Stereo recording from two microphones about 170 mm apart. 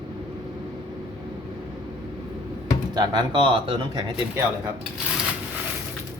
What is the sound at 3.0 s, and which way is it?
Speech, 25° right (ahead or behind).